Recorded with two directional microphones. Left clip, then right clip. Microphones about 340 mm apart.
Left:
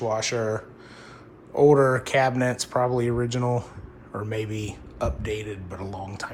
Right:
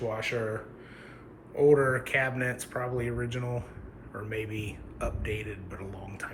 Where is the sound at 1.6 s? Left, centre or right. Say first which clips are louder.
Left 5 dB; centre.